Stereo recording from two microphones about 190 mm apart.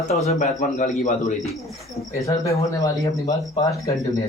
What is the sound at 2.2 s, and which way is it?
Speech, 15° left (ahead or behind).